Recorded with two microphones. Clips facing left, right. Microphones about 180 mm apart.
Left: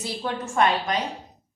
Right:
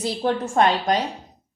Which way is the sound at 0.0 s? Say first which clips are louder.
Right 7 dB; 40° right (ahead or behind).